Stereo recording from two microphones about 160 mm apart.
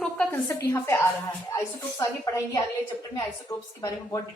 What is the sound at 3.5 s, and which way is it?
Speech, 15° left (ahead or behind).